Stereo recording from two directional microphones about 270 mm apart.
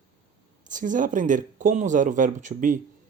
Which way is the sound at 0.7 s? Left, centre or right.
Right.